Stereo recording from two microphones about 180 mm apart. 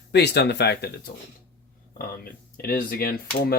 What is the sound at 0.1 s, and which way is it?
Speech, 65° left (ahead or behind).